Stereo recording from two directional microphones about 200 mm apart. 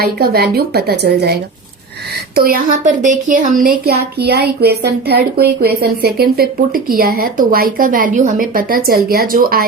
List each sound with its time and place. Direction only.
0.0 s speech: 50° right (ahead or behind)